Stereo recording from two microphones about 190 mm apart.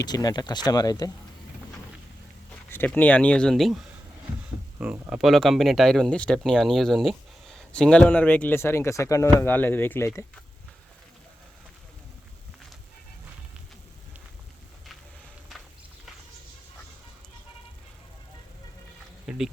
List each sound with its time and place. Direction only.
0.1 s speech: 20° left (ahead or behind)
2.6 s speech: 10° left (ahead or behind)
4.8 s speech: 5° right (ahead or behind); by 10.1 s 10° left (ahead or behind)
19.3 s a sound: 5° right (ahead or behind)